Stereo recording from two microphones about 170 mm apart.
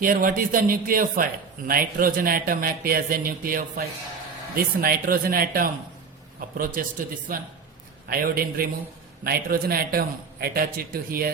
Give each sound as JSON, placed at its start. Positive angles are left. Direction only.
{"t": 0.0, "sound": "a man's voice", "side_deg": -55}
{"t": 6.8, "sound": "a man's voice", "side_deg": -55}
{"t": 8.1, "sound": "a man's voice", "side_deg": -60}